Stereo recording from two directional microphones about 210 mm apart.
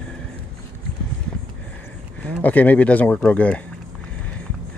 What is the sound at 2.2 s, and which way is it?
Speech, 5° left (ahead or behind).